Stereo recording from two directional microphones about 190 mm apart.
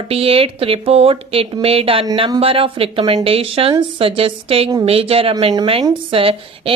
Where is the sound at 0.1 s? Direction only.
30° right (ahead or behind).